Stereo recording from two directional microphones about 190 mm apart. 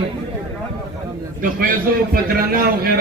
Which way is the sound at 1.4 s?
45° right (ahead or behind).